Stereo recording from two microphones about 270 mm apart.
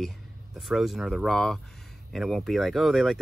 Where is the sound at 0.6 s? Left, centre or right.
Centre.